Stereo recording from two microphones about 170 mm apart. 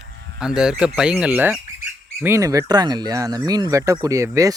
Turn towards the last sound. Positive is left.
turn(degrees=-20)  # may be behind; listen again after turning